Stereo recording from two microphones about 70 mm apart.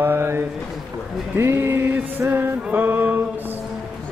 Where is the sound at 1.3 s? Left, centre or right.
Right.